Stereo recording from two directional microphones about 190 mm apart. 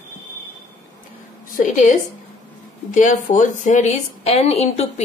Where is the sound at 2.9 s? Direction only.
45° left (ahead or behind).